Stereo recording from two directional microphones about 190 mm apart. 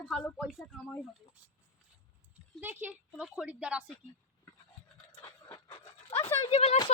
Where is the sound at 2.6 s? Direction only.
10° right (ahead or behind).